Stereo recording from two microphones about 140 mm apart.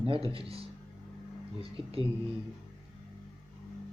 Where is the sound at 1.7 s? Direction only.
40° right (ahead or behind).